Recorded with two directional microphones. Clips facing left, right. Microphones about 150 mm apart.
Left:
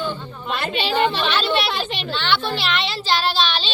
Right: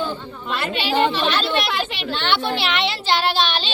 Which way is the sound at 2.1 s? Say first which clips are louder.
Right 1 dB; 50° right (ahead or behind).